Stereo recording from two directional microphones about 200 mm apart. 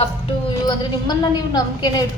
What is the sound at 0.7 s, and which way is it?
A woman's voice, 20° left (ahead or behind).